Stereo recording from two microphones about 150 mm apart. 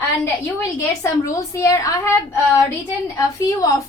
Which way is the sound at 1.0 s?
20° left (ahead or behind).